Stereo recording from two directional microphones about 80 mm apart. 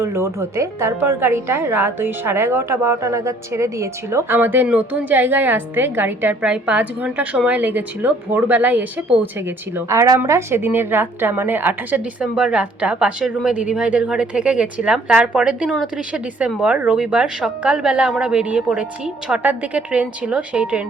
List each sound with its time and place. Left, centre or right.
0.0 s a woman's voice: right
4.4 s a woman's voice: right
6.4 s a woman's voice: centre
9.7 s a woman's voice: right
12.2 s a woman's voice: centre